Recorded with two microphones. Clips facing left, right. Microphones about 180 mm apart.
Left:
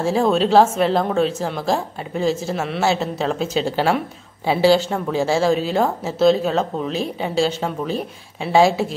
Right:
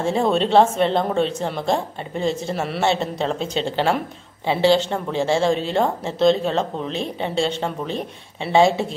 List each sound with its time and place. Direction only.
0.0 s a woman's voice: centre (ahead or behind)